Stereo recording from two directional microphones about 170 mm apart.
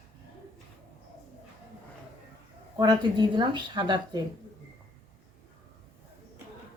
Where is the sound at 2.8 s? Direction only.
25° right (ahead or behind).